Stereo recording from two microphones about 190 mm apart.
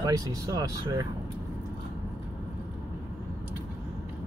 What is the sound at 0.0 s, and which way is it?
Speech, 20° right (ahead or behind).